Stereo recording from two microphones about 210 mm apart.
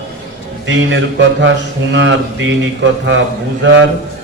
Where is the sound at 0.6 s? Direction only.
60° right (ahead or behind).